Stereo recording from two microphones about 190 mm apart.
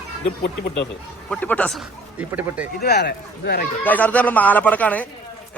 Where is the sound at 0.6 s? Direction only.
65° left (ahead or behind).